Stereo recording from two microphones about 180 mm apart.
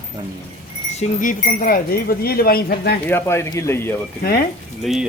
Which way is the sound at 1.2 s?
50° left (ahead or behind).